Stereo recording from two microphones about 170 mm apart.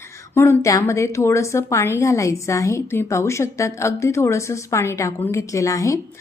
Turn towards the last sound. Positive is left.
turn(degrees=20)  # may be behind; listen again after turning